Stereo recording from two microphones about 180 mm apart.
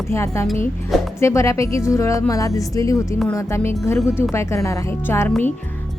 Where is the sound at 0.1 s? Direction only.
15° left (ahead or behind).